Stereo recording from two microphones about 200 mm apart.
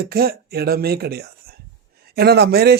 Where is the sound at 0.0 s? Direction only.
50° right (ahead or behind).